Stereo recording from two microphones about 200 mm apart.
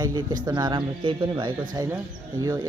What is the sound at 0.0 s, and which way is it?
A woman's voice, 20° right (ahead or behind).